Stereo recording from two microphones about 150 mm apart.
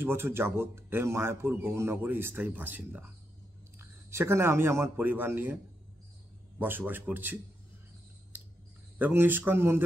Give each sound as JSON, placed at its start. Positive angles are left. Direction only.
{"t": 0.0, "sound": "speech", "side_deg": -15}
{"t": 6.6, "sound": "speech", "side_deg": -10}
{"t": 8.9, "sound": "speech", "side_deg": -15}